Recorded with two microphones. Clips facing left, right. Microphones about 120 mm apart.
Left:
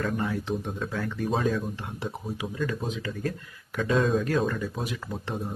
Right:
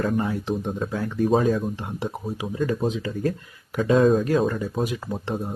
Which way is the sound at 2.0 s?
40° right (ahead or behind).